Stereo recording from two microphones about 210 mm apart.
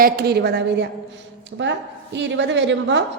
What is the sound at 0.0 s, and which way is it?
A woman's voice, 50° right (ahead or behind).